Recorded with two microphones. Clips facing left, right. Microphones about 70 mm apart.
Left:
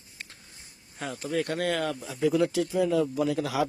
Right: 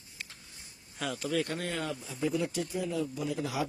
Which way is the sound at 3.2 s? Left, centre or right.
Left.